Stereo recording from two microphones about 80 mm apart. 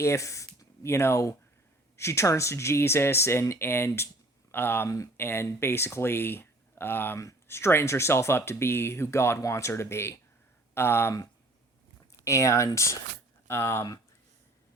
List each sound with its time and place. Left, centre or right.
0.0 s speech: left
12.2 s speech: left